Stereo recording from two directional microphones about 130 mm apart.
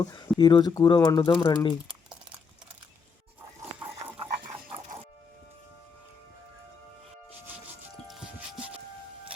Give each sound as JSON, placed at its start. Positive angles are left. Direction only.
{"t": 0.0, "sound": "speech", "side_deg": 30}